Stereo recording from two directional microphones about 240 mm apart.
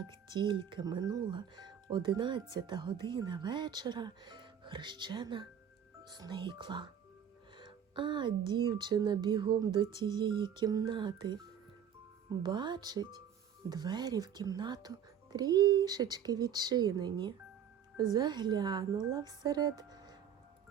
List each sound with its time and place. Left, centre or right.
0.0 s speech: centre